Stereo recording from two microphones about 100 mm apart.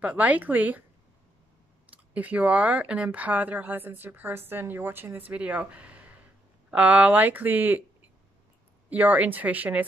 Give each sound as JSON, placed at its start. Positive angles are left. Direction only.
{"t": 0.0, "sound": "speech", "side_deg": -15}
{"t": 2.1, "sound": "speech", "side_deg": -15}
{"t": 8.9, "sound": "speech", "side_deg": -15}